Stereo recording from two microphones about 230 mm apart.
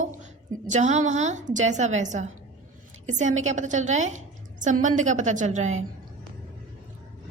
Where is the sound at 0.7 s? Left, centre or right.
Right.